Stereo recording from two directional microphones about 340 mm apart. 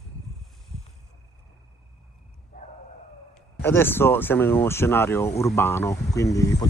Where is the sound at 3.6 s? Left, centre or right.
Centre.